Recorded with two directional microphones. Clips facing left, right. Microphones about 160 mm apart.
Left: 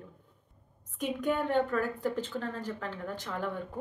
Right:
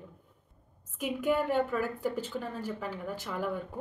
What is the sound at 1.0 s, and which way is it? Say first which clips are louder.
A woman's voice: right 1 dB; 5° right (ahead or behind).